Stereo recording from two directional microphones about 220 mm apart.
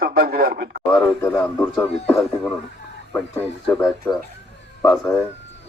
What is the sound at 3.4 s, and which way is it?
Speech, centre (ahead or behind).